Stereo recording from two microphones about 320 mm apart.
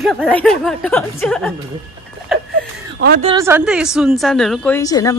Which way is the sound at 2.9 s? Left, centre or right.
Right.